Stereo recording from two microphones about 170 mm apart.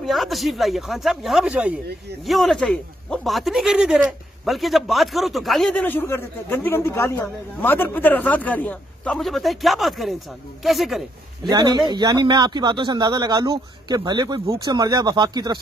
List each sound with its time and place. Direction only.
0.0 s speech: centre (ahead or behind)
11.4 s a man's voice: 25° right (ahead or behind)